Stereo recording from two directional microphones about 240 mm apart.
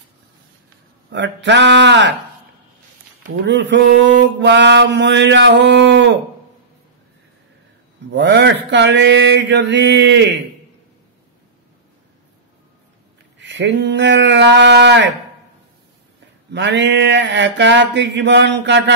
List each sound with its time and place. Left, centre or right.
1.1 s mantra: right
3.4 s mantra: right
8.1 s mantra: right
13.4 s mantra: right
16.5 s mantra: right